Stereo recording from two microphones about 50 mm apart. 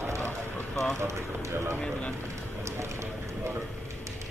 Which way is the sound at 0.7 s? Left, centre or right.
Centre.